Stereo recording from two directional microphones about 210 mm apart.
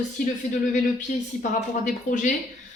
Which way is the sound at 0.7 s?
35° left (ahead or behind).